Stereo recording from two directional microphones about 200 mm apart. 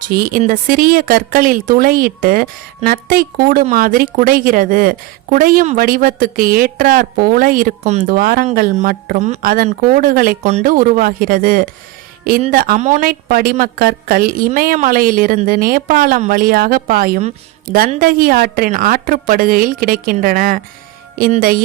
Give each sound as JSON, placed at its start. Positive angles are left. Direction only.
{"t": 0.1, "sound": "a woman's voice", "side_deg": -45}